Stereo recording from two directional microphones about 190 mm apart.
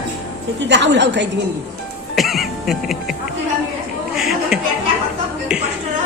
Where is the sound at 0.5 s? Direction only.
70° right (ahead or behind).